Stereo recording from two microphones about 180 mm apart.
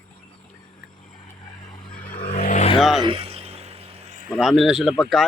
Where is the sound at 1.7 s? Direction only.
25° left (ahead or behind); by 2.6 s 45° left (ahead or behind).